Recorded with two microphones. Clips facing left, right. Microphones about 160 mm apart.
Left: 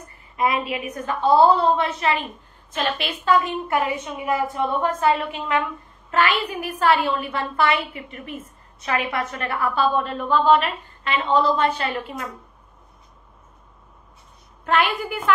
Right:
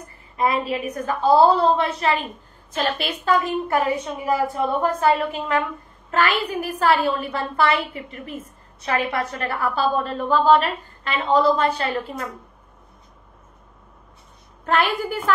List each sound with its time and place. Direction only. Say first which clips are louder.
0.4 s a woman's voice: right 1 dB; 35° right (ahead or behind)
14.7 s a woman's voice: right 1 dB; 40° right (ahead or behind)